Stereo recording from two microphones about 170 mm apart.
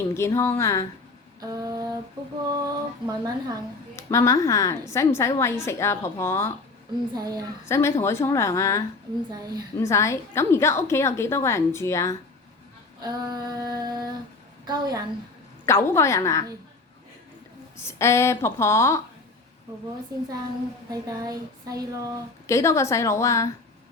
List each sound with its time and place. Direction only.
0.1 s a woman's voice: 15° left (ahead or behind)
1.4 s a sound: 20° right (ahead or behind)
2.5 s female singing: 20° right (ahead or behind)
3.9 s a woman's voice: 15° left (ahead or behind)
7.1 s female singing: 25° right (ahead or behind)
7.7 s a woman's voice: 15° left (ahead or behind)
9.3 s female singing: 25° right (ahead or behind)
9.8 s a woman's voice: 15° left (ahead or behind)
13.0 s female singing: 20° right (ahead or behind)
15.6 s a woman's voice: 15° left (ahead or behind)
17.7 s a woman's voice: 15° left (ahead or behind)
20.1 s female singing: 20° right (ahead or behind)
22.4 s a woman's voice: 15° left (ahead or behind)